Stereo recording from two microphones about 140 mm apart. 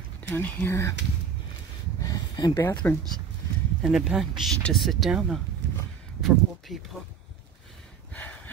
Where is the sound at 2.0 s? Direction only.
25° left (ahead or behind).